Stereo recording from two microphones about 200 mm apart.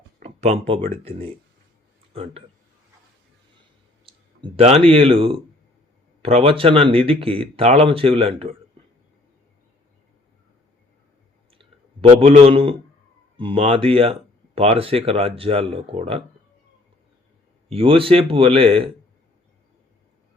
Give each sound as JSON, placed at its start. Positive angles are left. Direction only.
{"t": 0.2, "sound": "speech", "side_deg": -30}
{"t": 4.4, "sound": "speech", "side_deg": -30}
{"t": 12.5, "sound": "speech", "side_deg": -25}
{"t": 17.7, "sound": "speech", "side_deg": -25}